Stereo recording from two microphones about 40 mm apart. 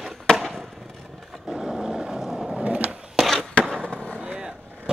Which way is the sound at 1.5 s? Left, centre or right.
Centre.